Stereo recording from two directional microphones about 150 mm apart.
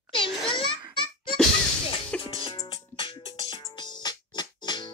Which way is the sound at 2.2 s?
35° left (ahead or behind).